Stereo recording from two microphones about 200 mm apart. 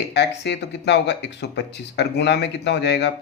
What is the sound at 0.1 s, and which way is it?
Speech, 60° left (ahead or behind).